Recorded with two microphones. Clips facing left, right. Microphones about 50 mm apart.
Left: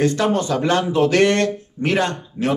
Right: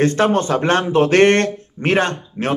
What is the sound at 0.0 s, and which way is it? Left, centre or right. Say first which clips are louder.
A man's voice: right 3 dB; right.